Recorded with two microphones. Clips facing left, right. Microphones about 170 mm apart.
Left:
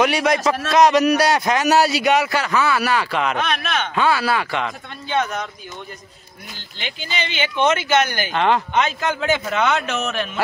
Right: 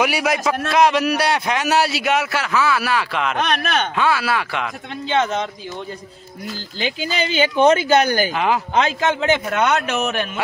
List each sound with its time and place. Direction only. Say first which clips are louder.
0.0 s a man's voice: left 2 dB; 5° right (ahead or behind)
5.0 s a man's voice: right 3 dB; 25° right (ahead or behind)
6.8 s speech: right 5 dB; 35° right (ahead or behind)
8.3 s a man's voice: left 1 dB; 5° right (ahead or behind)
8.7 s a man's voice: right 2 dB; 30° right (ahead or behind)
9.6 s a man's voice: right 2 dB; 10° right (ahead or behind)